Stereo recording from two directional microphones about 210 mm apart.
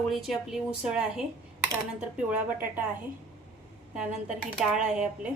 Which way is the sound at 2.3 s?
10° right (ahead or behind).